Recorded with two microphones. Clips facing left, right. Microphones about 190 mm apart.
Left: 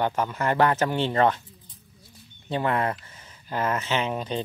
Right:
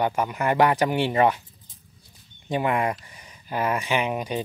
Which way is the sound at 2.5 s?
15° right (ahead or behind).